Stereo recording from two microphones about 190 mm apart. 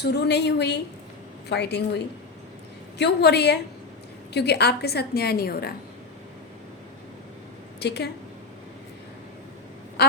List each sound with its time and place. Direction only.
0.0 s a woman's voice: 60° left (ahead or behind)
3.0 s a woman's voice: 60° left (ahead or behind)
7.8 s a woman's voice: 60° left (ahead or behind)
10.0 s a woman's voice: 60° left (ahead or behind)